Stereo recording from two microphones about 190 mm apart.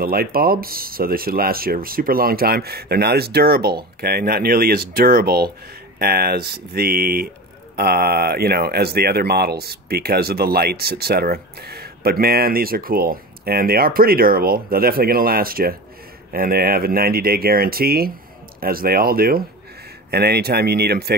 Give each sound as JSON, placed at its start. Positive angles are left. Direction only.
{"t": 0.0, "sound": "speech", "side_deg": -55}